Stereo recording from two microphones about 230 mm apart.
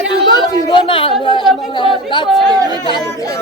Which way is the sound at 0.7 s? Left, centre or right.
Left.